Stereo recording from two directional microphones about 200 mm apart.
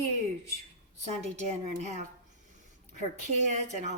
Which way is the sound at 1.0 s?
35° right (ahead or behind).